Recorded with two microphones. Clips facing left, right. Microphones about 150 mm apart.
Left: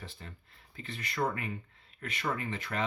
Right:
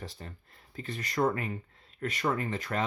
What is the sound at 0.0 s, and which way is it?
Speech, 40° right (ahead or behind).